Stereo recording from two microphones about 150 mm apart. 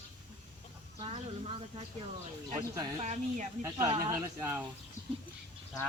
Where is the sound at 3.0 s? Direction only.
50° right (ahead or behind).